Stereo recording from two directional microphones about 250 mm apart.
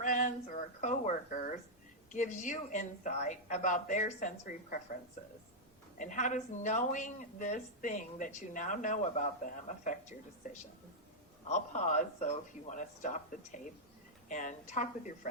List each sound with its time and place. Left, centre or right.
0.0 s a sound: left
2.1 s speech: left
6.0 s speech: left